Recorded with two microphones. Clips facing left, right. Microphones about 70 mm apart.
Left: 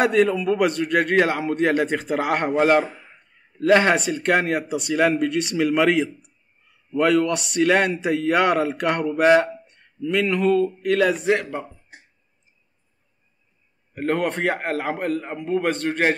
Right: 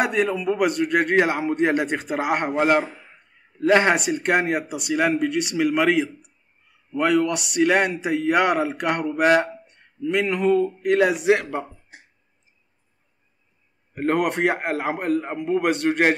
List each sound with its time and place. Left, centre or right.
0.0 s a man's voice: centre
10.2 s speech: right
14.1 s speech: right
15.0 s a man's voice: right